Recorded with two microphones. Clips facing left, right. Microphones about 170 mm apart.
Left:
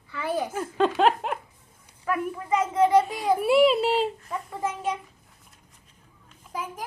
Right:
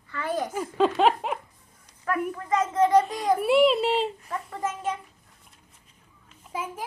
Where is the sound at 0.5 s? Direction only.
Centre (ahead or behind).